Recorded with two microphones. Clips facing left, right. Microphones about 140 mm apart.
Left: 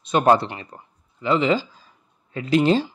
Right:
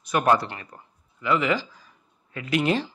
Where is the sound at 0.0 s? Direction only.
25° left (ahead or behind).